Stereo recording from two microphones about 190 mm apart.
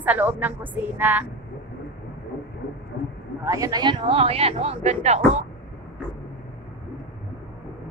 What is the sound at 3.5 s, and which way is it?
Speech, 20° right (ahead or behind).